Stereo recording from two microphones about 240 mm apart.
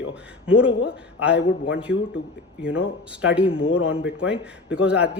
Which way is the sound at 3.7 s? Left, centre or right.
Left.